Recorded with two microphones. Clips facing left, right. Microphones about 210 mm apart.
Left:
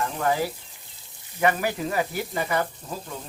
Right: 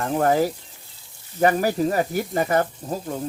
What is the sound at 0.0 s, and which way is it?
Speech, 45° right (ahead or behind).